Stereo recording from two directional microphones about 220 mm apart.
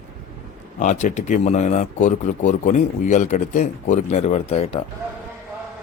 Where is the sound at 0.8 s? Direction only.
35° left (ahead or behind).